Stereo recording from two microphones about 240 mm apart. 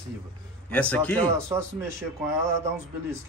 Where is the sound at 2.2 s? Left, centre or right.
Centre.